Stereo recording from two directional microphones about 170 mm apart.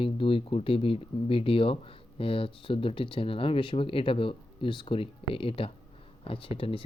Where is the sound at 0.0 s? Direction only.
30° left (ahead or behind).